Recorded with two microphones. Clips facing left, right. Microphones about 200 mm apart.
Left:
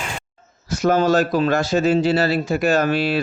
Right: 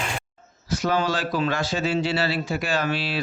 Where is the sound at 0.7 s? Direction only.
45° left (ahead or behind).